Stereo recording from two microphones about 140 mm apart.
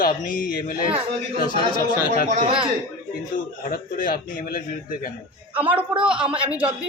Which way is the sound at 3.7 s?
85° left.